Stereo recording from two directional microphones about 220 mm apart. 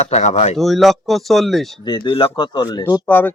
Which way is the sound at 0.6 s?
Centre (ahead or behind).